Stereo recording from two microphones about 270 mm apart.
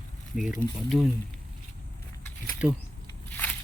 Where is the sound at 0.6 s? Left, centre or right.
Left.